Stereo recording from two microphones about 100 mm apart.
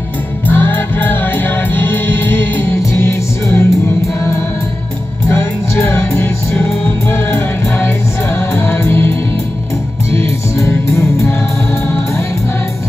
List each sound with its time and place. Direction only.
0.5 s music: 20° left (ahead or behind)
5.3 s music: 25° left (ahead or behind)
10.1 s music: 25° left (ahead or behind)